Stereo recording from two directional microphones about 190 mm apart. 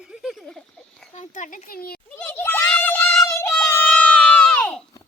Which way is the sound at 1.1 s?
40° left (ahead or behind).